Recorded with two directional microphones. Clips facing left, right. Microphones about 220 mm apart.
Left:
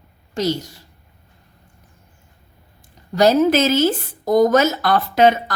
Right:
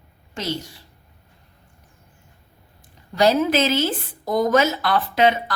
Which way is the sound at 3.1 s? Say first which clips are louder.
Left 4 dB; 45° left (ahead or behind).